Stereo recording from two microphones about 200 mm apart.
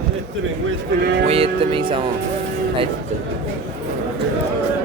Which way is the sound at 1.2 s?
30° right (ahead or behind).